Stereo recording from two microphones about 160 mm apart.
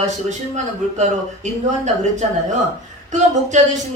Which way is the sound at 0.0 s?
45° right (ahead or behind).